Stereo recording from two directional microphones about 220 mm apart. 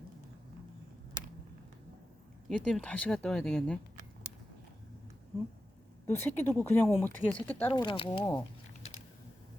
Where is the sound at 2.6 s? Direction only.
5° left (ahead or behind).